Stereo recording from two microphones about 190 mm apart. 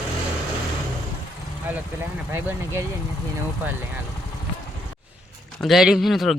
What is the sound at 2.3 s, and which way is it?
Speech, 10° right (ahead or behind).